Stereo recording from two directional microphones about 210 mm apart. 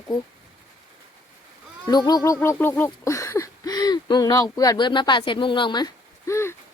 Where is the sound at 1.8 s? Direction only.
20° left (ahead or behind).